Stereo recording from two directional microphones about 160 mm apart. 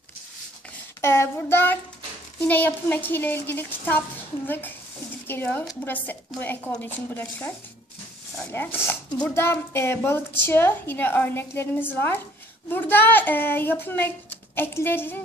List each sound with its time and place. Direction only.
1.0 s a child's voice: 15° left (ahead or behind)